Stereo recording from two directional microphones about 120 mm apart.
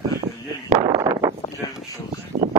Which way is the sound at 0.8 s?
30° right (ahead or behind).